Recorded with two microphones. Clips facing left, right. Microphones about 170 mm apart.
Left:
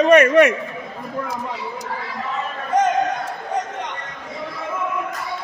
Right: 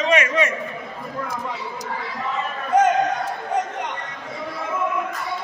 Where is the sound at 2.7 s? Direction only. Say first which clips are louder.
Right 1 dB; 10° right (ahead or behind).